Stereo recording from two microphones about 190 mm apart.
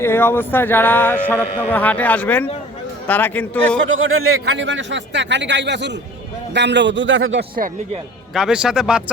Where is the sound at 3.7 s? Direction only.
90° right.